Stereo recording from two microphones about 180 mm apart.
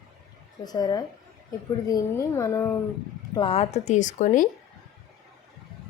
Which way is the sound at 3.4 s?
30° left (ahead or behind).